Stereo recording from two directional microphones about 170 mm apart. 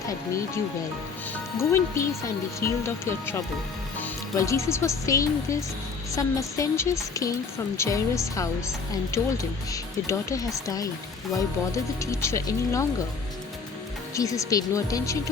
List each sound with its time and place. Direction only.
1.5 s a woman's voice: 15° left (ahead or behind)
14.2 s a woman's voice: 20° left (ahead or behind)